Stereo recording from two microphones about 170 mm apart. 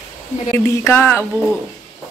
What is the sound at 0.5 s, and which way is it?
Speech, 15° left (ahead or behind).